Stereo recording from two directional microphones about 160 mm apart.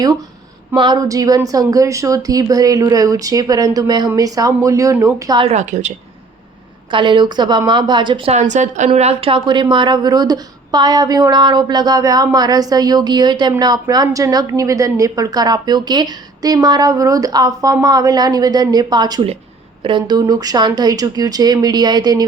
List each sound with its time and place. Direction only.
0.8 s a woman's voice: 25° right (ahead or behind)
5.4 s a woman's voice: 45° right (ahead or behind)
6.9 s a woman's voice: 30° right (ahead or behind)